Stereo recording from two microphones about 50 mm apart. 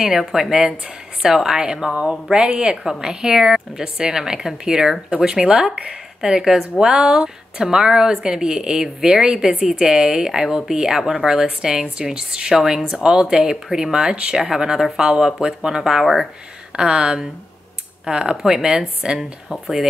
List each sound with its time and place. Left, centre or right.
0.0 s a woman's voice: centre